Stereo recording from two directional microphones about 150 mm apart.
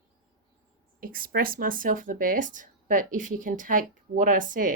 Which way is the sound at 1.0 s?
75° right (ahead or behind).